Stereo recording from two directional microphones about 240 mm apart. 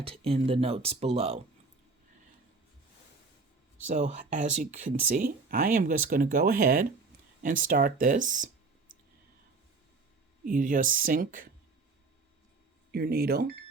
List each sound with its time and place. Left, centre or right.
0.0 s speech: right
3.8 s speech: right
10.4 s speech: right
12.9 s speech: right